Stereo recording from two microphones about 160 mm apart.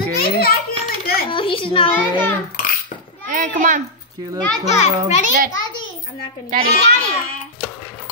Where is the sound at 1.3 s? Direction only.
35° left (ahead or behind).